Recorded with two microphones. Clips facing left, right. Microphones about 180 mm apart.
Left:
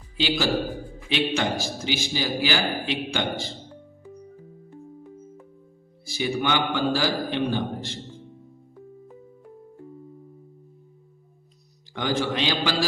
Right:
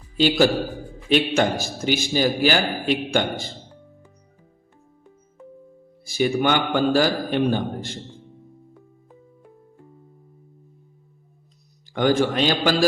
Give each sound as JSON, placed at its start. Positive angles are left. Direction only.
{"t": 0.2, "sound": "a man's voice", "side_deg": -50}
{"t": 6.1, "sound": "a man's voice", "side_deg": -50}
{"t": 11.9, "sound": "a man's voice", "side_deg": -50}